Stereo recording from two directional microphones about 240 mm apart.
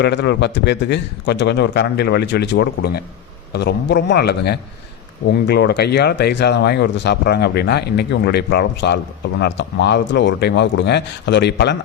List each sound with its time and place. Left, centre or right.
0.0 s speech: left